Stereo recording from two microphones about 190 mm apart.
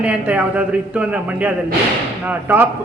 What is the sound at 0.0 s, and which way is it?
A man's voice, 5° right (ahead or behind).